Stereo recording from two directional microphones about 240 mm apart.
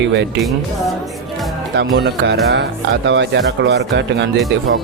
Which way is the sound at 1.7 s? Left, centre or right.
Right.